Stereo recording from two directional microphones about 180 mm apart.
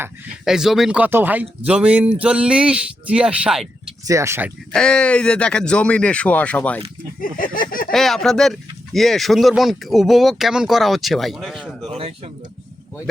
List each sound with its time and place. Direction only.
0.0 s speech: 5° right (ahead or behind)
4.0 s speech: 15° right (ahead or behind)
4.7 s speech: 5° left (ahead or behind)
7.2 s a sound: 50° left (ahead or behind)
7.9 s speech: centre (ahead or behind)
11.9 s speech: 35° right (ahead or behind)